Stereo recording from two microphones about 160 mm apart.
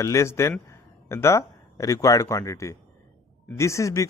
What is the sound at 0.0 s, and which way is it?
Speech, 20° left (ahead or behind).